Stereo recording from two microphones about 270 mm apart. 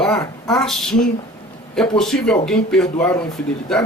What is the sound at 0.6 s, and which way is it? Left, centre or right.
Speech, centre.